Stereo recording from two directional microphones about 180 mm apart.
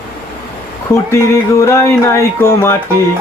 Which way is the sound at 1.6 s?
15° left (ahead or behind).